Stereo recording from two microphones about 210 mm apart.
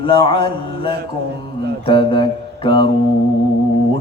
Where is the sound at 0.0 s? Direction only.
25° left (ahead or behind).